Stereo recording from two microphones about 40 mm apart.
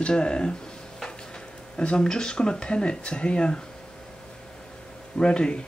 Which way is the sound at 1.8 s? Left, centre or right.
Left.